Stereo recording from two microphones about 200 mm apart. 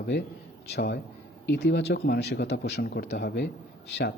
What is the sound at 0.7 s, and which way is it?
Speech, 55° left (ahead or behind).